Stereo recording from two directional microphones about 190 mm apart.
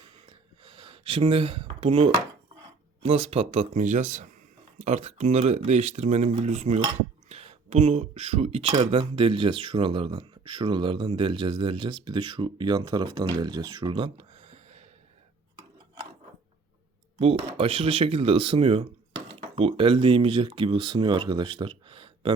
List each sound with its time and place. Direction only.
0.0 s a sound: 30° right (ahead or behind)
3.2 s speech: 35° right (ahead or behind)
17.2 s speech: 30° right (ahead or behind)